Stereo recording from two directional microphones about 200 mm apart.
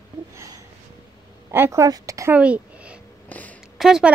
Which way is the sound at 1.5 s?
10° right (ahead or behind).